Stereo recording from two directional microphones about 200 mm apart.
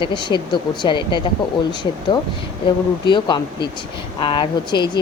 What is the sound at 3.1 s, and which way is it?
Speech, 20° left (ahead or behind).